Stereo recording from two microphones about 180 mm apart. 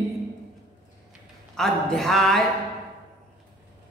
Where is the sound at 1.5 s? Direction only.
5° left (ahead or behind).